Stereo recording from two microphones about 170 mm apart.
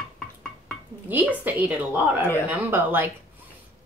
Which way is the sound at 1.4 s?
10° right (ahead or behind).